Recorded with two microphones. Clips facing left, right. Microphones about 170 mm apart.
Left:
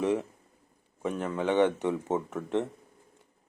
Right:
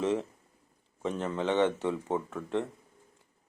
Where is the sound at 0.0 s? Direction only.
15° left (ahead or behind).